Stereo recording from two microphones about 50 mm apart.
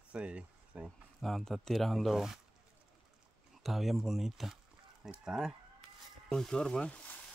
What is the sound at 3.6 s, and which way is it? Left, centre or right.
Speech, centre.